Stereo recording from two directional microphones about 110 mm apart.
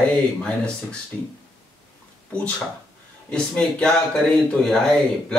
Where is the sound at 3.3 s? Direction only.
10° left (ahead or behind).